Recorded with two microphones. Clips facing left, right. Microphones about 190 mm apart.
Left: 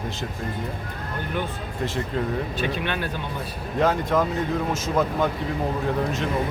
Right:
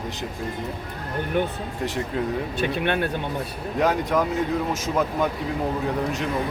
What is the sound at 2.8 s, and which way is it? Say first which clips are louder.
Speech: right 4 dB; 55° right (ahead or behind).